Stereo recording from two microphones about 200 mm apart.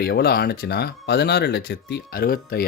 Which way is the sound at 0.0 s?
50° left (ahead or behind).